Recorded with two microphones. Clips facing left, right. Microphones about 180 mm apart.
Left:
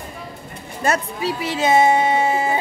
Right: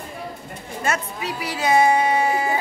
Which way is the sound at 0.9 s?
25° left (ahead or behind).